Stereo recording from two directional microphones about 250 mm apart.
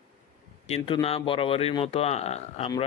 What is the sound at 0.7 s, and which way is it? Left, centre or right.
Speech, left.